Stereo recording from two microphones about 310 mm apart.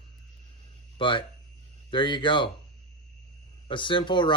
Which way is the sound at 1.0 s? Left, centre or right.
Centre.